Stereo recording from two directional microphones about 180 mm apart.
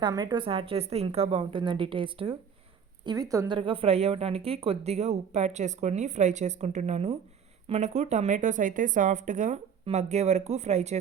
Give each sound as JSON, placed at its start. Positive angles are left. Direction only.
{"t": 0.0, "sound": "speech", "side_deg": -25}